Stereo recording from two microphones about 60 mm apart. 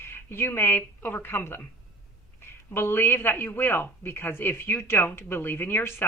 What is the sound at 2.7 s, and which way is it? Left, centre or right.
A woman's voice, left.